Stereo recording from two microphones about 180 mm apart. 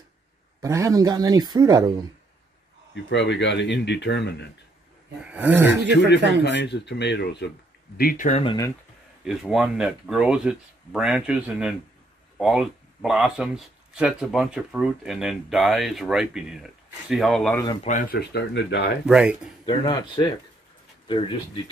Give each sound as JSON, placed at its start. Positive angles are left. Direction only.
{"t": 0.6, "sound": "speech", "side_deg": -15}
{"t": 2.9, "sound": "speech", "side_deg": 75}
{"t": 5.2, "sound": "a sound", "side_deg": -10}
{"t": 5.9, "sound": "speech", "side_deg": 75}
{"t": 8.0, "sound": "speech", "side_deg": 50}
{"t": 8.3, "sound": "speech", "side_deg": 35}
{"t": 9.2, "sound": "speech", "side_deg": 0}
{"t": 17.8, "sound": "speech", "side_deg": 45}
{"t": 18.2, "sound": "speech", "side_deg": 75}
{"t": 19.0, "sound": "speech", "side_deg": -5}
{"t": 19.6, "sound": "speech", "side_deg": 25}